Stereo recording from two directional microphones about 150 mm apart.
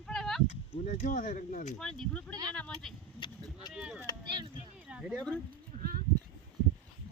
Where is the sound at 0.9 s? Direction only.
55° left (ahead or behind).